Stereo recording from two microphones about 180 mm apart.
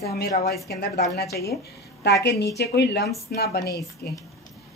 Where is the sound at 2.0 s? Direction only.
65° left (ahead or behind).